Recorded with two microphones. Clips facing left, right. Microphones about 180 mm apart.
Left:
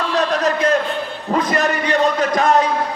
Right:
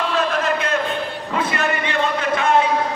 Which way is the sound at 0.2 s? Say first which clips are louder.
Left 5 dB; 40° left (ahead or behind).